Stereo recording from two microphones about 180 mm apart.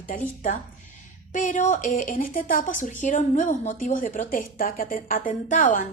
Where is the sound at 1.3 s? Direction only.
45° left (ahead or behind).